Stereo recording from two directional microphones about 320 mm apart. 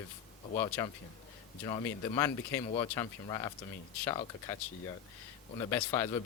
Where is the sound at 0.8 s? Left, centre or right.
Centre.